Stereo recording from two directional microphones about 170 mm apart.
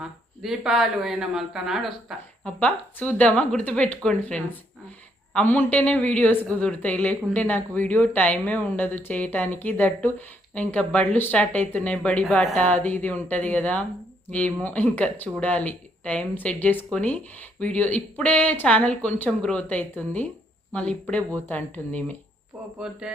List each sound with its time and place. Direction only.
0.0 s a woman's voice: 5° right (ahead or behind)
22.8 s speech: 5° right (ahead or behind)